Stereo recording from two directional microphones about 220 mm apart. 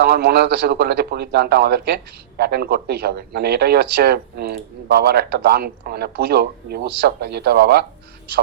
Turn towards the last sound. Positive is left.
turn(degrees=-45)  # may be behind; listen again after turning